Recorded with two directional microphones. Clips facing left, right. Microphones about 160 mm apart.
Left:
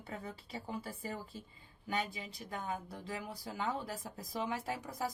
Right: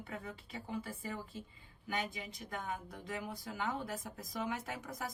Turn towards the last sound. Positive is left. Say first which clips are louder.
# left 4 dB
turn(degrees=30)  # may be behind; listen again after turning